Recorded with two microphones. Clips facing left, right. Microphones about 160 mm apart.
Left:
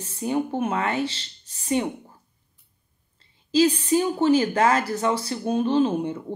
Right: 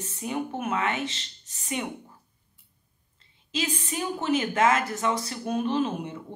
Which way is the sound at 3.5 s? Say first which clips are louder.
Left 12 dB; 30° left (ahead or behind).